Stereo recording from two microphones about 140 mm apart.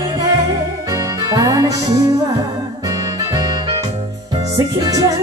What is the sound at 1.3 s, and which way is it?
Music, 25° right (ahead or behind).